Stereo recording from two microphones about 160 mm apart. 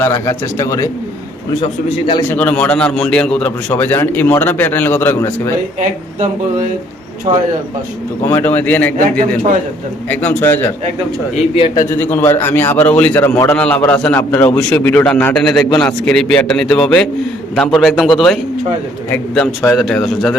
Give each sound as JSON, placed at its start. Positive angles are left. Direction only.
{"t": 0.0, "sound": "a man's voice", "side_deg": 20}
{"t": 2.3, "sound": "a man's voice", "side_deg": 10}
{"t": 7.3, "sound": "speech", "side_deg": -30}
{"t": 8.2, "sound": "a man's voice", "side_deg": 15}
{"t": 11.5, "sound": "a man's voice", "side_deg": 30}
{"t": 12.1, "sound": "a man's voice", "side_deg": 15}